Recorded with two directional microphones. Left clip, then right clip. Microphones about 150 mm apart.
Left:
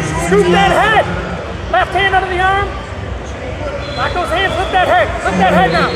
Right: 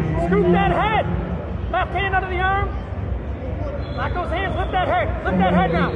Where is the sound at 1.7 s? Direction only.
55° left (ahead or behind).